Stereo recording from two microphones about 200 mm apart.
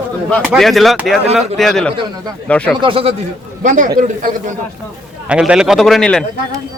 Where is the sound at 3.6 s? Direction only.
40° right (ahead or behind).